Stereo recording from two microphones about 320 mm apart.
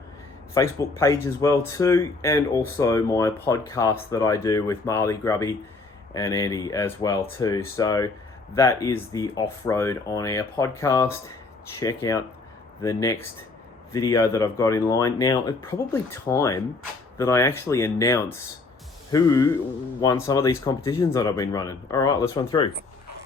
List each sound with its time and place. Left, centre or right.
0.5 s speech: centre